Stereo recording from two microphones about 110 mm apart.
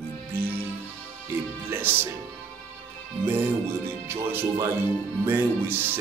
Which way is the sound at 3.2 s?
20° right (ahead or behind).